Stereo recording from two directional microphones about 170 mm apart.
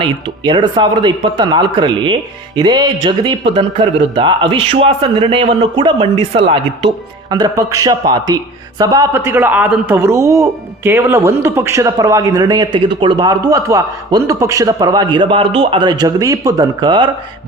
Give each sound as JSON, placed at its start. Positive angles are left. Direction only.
{"t": 0.0, "sound": "a man's voice", "side_deg": -30}